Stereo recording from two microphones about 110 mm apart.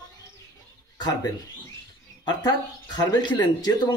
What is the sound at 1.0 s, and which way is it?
Speech, 35° left (ahead or behind).